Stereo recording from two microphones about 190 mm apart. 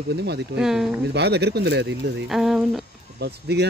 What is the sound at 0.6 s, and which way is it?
Speech, centre (ahead or behind).